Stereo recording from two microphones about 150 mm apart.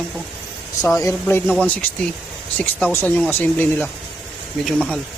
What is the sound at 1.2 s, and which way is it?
Speech, 10° left (ahead or behind).